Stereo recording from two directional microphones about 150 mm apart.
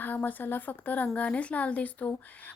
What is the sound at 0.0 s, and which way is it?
Speech, 10° left (ahead or behind).